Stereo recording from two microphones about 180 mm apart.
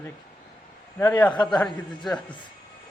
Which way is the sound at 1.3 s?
25° left (ahead or behind).